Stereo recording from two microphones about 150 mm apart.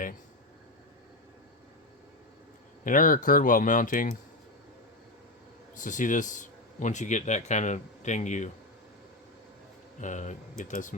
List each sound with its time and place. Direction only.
2.8 s speech: 60° left (ahead or behind)
5.7 s speech: 60° left (ahead or behind)
10.0 s speech: 55° left (ahead or behind)